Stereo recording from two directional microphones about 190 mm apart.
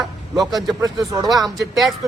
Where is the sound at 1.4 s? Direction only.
Centre (ahead or behind).